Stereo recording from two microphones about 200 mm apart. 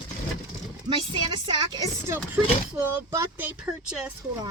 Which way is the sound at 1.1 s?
20° right (ahead or behind).